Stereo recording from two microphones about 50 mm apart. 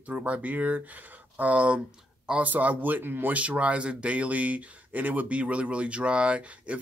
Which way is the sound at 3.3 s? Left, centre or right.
Right.